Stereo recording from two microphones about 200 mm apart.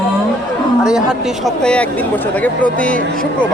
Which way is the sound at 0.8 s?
Centre (ahead or behind).